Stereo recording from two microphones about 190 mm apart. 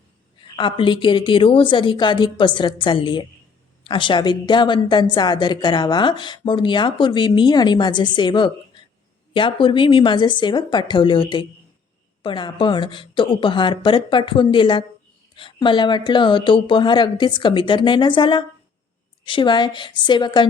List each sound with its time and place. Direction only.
0.5 s speech: 25° left (ahead or behind)